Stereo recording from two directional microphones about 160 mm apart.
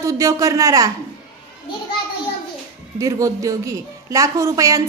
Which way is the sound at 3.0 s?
20° right (ahead or behind).